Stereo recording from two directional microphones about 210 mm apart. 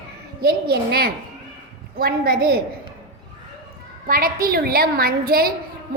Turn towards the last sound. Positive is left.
turn(degrees=-45)  # may be behind; listen again after turning